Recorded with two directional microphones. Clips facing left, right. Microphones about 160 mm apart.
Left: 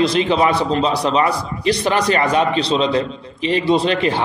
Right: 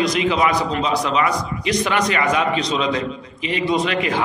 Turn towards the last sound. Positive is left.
turn(degrees=30)  # may be behind; listen again after turning